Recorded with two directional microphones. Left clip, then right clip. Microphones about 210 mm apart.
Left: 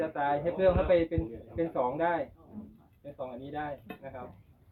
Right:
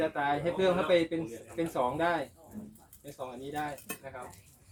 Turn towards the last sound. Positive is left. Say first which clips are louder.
# even
turn(degrees=-25)  # may be behind; listen again after turning